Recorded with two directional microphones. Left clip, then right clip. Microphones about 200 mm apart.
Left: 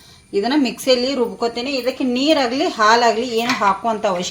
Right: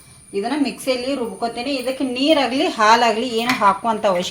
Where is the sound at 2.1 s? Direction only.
20° left (ahead or behind).